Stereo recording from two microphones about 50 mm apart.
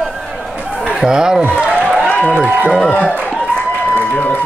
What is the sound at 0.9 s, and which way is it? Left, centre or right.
Speech, centre.